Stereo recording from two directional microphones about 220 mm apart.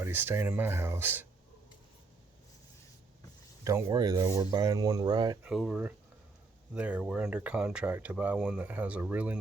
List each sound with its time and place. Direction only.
0.0 s speech: 10° right (ahead or behind)
3.6 s speech: 15° right (ahead or behind)
5.4 s speech: 5° right (ahead or behind)